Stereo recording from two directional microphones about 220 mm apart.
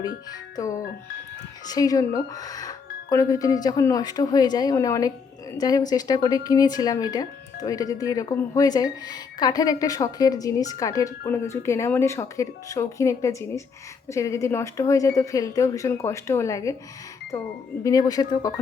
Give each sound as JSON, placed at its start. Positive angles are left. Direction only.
{"t": 0.5, "sound": "speech", "side_deg": 15}